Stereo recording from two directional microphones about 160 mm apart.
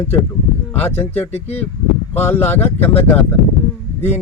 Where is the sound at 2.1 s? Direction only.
10° left (ahead or behind).